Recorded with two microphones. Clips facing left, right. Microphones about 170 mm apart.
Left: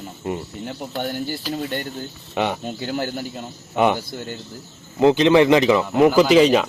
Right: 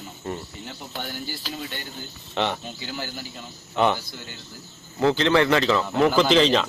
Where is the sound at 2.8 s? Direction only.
55° left (ahead or behind).